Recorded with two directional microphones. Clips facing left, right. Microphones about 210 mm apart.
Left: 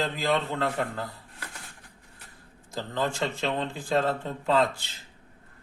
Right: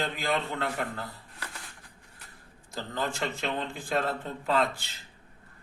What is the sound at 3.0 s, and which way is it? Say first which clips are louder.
Speech: left 3 dB; 30° left (ahead or behind).